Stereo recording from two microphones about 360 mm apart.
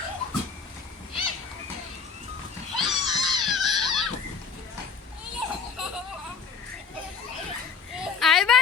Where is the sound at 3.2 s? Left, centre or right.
Centre.